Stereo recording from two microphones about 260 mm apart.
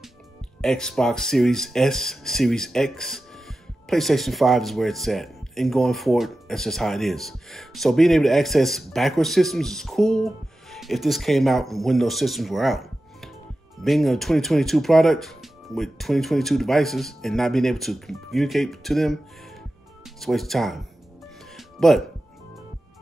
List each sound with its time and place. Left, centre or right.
0.6 s speech: centre
20.2 s speech: centre
21.5 s music: centre